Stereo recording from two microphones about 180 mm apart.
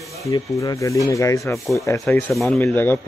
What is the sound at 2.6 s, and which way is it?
Speech, 10° left (ahead or behind).